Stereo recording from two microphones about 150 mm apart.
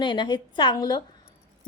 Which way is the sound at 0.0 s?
30° left (ahead or behind).